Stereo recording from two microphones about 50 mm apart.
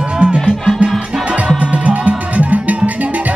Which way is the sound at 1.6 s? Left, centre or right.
Right.